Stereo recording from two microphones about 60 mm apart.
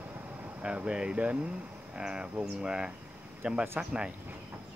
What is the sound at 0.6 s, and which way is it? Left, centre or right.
Speech, centre.